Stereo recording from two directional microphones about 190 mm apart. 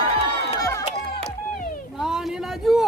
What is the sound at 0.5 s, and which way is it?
Crowd, 15° left (ahead or behind).